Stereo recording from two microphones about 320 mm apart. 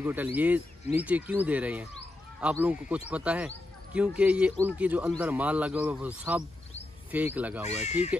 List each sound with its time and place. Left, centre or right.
0.0 s speech: centre
7.6 s speech: left